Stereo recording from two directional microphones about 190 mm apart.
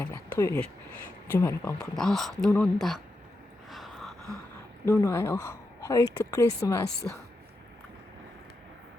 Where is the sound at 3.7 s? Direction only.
Centre (ahead or behind).